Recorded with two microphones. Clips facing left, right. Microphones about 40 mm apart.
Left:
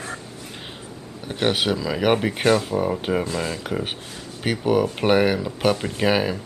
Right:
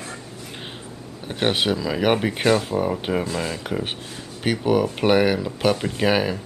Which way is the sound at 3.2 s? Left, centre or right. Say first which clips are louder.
Even; right.